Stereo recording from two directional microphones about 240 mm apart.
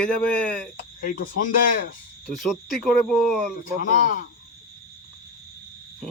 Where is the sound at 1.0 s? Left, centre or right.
Left.